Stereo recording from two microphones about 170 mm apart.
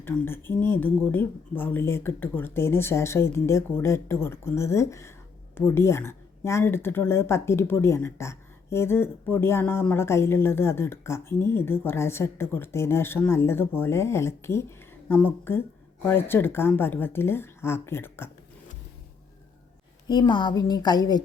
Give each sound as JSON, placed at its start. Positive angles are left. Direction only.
{"t": 0.0, "sound": "speech", "side_deg": 10}
{"t": 20.1, "sound": "a woman's voice", "side_deg": 25}